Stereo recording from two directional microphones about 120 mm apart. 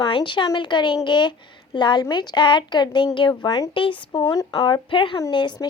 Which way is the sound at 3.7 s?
45° left (ahead or behind).